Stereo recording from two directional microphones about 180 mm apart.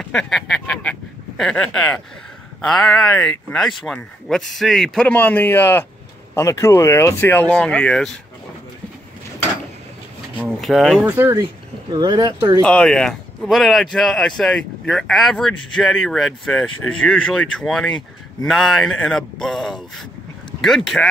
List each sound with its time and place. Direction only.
0.0 s a sound: 5° left (ahead or behind)
2.6 s speech: 5° left (ahead or behind)
10.6 s speech: centre (ahead or behind)
11.0 s speech: 10° right (ahead or behind)
11.4 s speech: 25° right (ahead or behind)
12.6 s speech: 5° left (ahead or behind)